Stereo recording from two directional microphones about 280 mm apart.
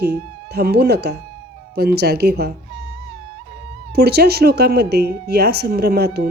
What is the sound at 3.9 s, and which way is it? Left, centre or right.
Speech, right.